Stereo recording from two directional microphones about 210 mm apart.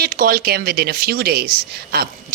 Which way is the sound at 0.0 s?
45° right (ahead or behind).